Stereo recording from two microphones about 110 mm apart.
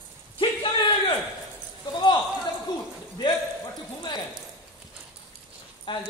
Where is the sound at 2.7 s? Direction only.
40° left (ahead or behind).